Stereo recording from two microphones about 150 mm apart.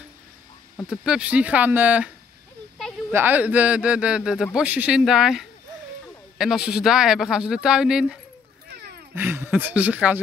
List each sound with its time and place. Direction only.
0.8 s a man's voice: 5° right (ahead or behind)
3.1 s a man's voice: 15° right (ahead or behind)
8.6 s wild animals: 90° right
9.1 s a man's voice: 15° right (ahead or behind)